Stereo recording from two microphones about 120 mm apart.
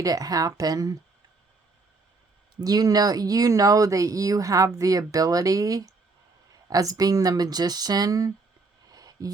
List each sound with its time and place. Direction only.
0.0 s speech: 30° right (ahead or behind)
2.6 s speech: 30° right (ahead or behind)
8.9 s a sound: 30° right (ahead or behind)